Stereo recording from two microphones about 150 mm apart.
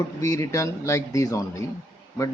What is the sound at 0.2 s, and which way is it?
A man's voice, 20° left (ahead or behind).